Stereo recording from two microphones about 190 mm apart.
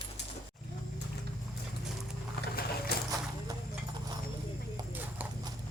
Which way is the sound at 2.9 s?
55° left (ahead or behind).